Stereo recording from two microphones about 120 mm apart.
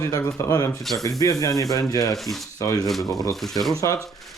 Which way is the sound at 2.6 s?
30° left (ahead or behind).